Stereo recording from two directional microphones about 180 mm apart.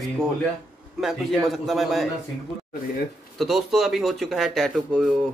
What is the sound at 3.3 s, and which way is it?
A man's voice, centre (ahead or behind).